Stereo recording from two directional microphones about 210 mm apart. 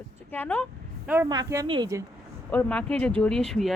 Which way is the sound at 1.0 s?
10° right (ahead or behind).